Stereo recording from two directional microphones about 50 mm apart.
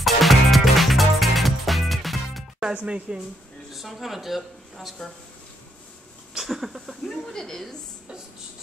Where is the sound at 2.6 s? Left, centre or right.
Centre.